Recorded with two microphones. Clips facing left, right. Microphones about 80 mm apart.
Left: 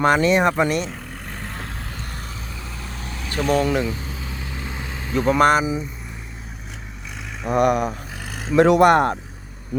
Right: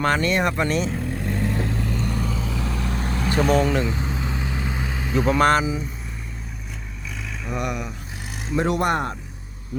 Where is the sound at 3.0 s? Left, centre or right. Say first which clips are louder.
Right 7 dB; right.